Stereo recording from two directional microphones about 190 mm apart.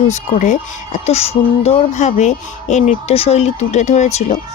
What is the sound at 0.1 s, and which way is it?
Speech, 40° left (ahead or behind).